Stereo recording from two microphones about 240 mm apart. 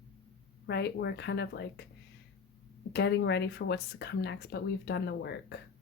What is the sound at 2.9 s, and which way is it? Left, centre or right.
A woman's voice, left.